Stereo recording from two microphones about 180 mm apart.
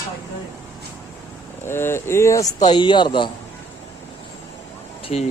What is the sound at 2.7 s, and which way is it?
Speech, 25° left (ahead or behind).